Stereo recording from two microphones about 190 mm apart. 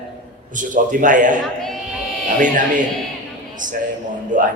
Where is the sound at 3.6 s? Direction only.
45° right (ahead or behind).